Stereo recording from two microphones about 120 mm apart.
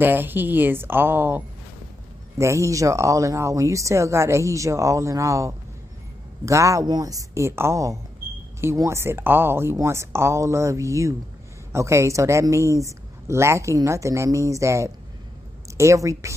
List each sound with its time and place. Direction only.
0.0 s speech: 15° right (ahead or behind)